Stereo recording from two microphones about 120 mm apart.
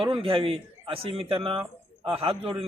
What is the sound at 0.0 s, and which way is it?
A man's voice, 50° right (ahead or behind).